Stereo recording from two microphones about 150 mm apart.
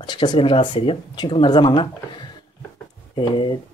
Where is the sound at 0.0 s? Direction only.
30° left (ahead or behind).